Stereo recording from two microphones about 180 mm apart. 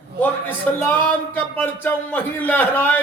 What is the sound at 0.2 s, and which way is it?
A man's voice, 10° left (ahead or behind).